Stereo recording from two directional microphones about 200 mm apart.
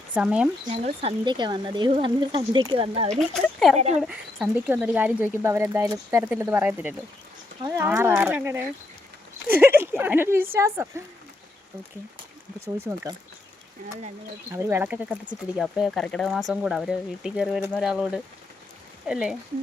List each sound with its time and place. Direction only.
0.1 s speech: 5° right (ahead or behind)
0.7 s speech: 25° right (ahead or behind)
3.2 s speech: centre (ahead or behind)
12.8 s speech: 10° right (ahead or behind)
14.5 s speech: 10° right (ahead or behind)